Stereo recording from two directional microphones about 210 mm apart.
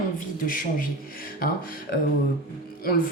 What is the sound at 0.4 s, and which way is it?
Speech, 40° left (ahead or behind).